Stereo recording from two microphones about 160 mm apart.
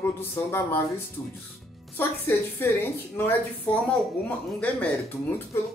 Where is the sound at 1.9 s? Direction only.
15° left (ahead or behind).